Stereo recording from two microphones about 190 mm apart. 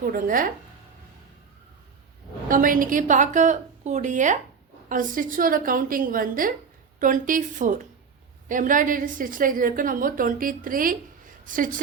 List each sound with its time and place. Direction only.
0.0 s a woman's voice: 50° right (ahead or behind)
2.5 s a woman's voice: 45° right (ahead or behind)